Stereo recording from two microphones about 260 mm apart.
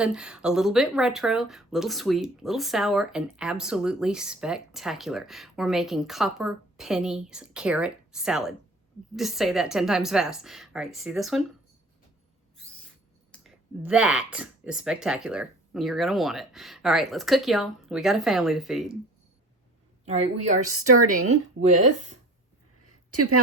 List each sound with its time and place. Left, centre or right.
0.0 s speech: centre
13.3 s speech: centre
20.1 s a woman's voice: right
20.7 s a woman's voice: right
23.1 s a woman's voice: right